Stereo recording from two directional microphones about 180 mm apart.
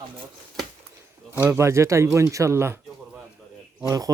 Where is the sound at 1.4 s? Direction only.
15° right (ahead or behind).